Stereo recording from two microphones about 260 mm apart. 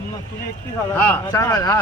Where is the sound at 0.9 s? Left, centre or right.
Centre.